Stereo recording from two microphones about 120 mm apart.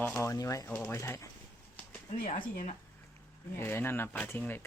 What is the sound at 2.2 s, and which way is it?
Speech, 90° left.